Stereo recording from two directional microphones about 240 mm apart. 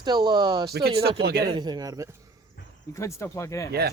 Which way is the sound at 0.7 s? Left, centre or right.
Right.